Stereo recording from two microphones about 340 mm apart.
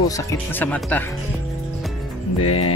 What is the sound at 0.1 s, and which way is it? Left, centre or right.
Speech, centre.